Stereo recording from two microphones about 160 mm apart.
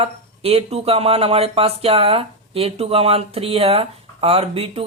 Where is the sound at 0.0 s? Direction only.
40° right (ahead or behind).